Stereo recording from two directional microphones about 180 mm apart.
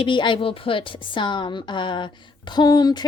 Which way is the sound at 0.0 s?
25° left (ahead or behind).